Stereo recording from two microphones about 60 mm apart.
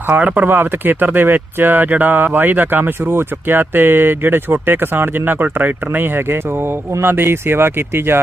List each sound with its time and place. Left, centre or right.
0.2 s speech: right